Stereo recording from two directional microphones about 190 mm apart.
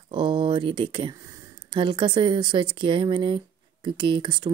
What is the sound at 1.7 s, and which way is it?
Speech, 25° right (ahead or behind).